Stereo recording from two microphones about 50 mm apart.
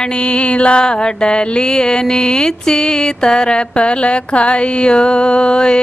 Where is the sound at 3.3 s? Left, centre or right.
Centre.